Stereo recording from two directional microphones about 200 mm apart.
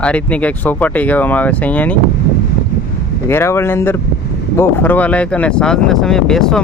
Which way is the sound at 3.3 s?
10° left (ahead or behind).